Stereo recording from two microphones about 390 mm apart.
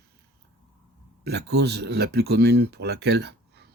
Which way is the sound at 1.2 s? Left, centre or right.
Right.